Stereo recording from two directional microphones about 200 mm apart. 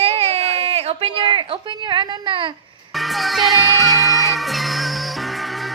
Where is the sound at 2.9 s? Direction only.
Centre (ahead or behind).